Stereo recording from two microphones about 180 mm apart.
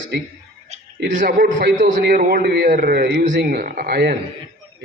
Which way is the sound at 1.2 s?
60° right (ahead or behind).